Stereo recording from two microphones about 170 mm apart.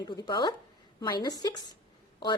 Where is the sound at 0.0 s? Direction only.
25° left (ahead or behind).